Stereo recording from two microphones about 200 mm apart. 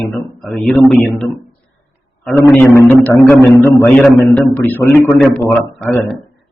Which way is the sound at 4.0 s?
Centre (ahead or behind).